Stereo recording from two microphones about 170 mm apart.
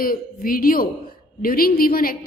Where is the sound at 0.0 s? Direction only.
55° left (ahead or behind).